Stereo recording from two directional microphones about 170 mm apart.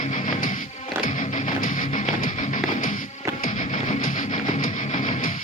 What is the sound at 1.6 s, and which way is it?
Music, 50° left (ahead or behind).